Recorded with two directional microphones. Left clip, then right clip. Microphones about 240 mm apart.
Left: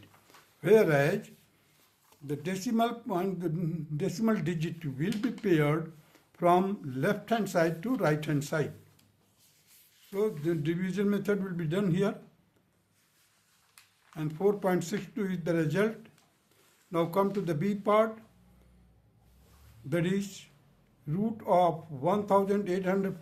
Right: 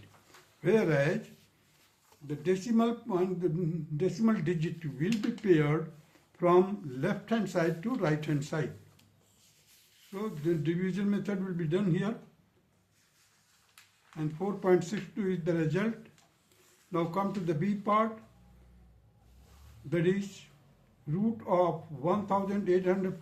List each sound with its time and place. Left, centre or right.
0.6 s a man's voice: left
2.2 s a man's voice: left
10.2 s a man's voice: left
14.2 s a man's voice: left
16.9 s a man's voice: left
19.9 s a man's voice: left